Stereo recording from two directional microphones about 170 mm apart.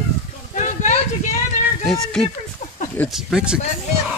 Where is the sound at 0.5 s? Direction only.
45° left (ahead or behind).